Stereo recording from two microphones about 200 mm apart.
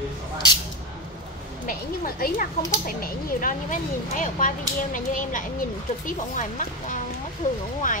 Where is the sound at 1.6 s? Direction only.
45° left (ahead or behind).